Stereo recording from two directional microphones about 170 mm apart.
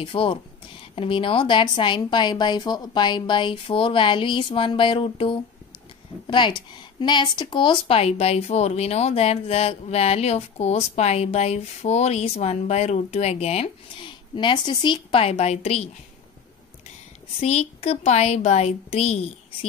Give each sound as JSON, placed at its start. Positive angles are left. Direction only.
{"t": 0.0, "sound": "a woman's voice", "side_deg": 30}
{"t": 14.3, "sound": "speech", "side_deg": 25}
{"t": 17.4, "sound": "speech", "side_deg": 35}